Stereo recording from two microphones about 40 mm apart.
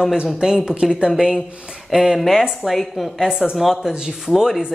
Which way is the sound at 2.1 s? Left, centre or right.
Centre.